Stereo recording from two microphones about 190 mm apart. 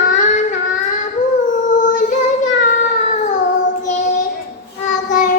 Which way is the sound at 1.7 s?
40° left (ahead or behind).